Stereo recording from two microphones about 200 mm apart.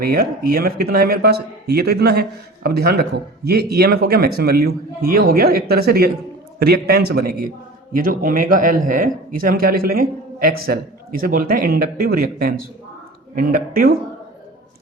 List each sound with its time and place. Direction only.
0.0 s speech: 50° right (ahead or behind)